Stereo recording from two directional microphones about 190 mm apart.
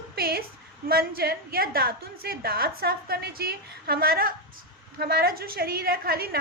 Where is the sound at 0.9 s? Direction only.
55° right (ahead or behind).